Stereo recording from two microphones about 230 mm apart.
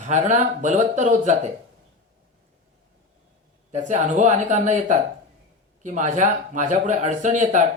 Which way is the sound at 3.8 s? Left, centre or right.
Right.